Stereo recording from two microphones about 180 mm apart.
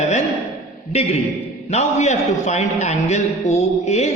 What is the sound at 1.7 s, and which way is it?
A man's voice, 40° left (ahead or behind).